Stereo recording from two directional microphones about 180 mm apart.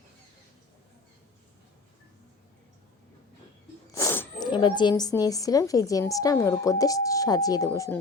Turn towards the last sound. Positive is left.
turn(degrees=15)  # may be behind; listen again after turning